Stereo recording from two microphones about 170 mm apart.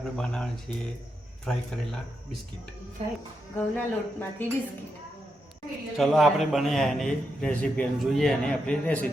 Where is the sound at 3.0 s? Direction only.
35° right (ahead or behind).